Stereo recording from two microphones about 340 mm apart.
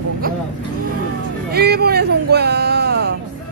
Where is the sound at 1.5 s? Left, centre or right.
Right.